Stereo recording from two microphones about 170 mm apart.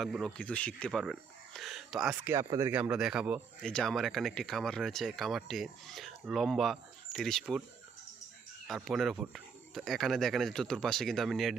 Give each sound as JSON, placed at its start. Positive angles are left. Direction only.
{"t": 0.0, "sound": "speech", "side_deg": 0}
{"t": 2.3, "sound": "speech", "side_deg": -15}
{"t": 8.6, "sound": "speech", "side_deg": 0}